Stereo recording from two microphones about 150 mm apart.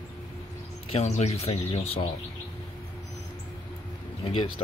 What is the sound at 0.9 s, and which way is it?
Speech, 45° left (ahead or behind).